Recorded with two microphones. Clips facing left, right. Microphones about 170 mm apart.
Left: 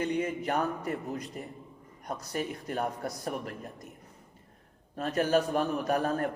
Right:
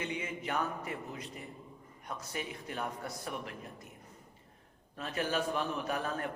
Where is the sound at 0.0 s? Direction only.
40° left (ahead or behind).